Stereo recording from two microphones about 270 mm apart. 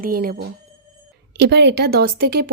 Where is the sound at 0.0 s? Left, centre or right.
Right.